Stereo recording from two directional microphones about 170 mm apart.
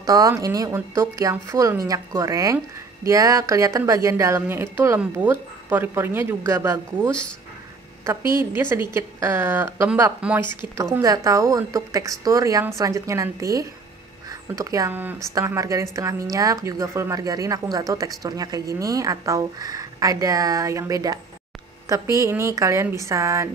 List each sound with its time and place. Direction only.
0.0 s speech: 20° right (ahead or behind)
8.3 s a woman's voice: 15° right (ahead or behind)